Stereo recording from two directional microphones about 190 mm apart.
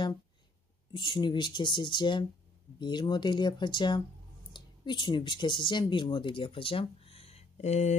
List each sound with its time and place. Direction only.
0.9 s speech: 25° left (ahead or behind)